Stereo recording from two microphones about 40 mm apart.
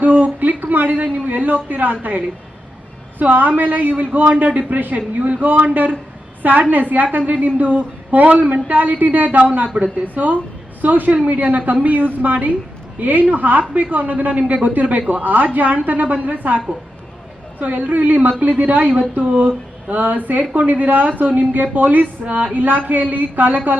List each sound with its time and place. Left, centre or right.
0.0 s a man's voice: right
17.6 s a woman's voice: right